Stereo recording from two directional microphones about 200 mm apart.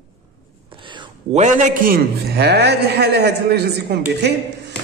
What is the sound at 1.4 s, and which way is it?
A man's voice, 45° right (ahead or behind).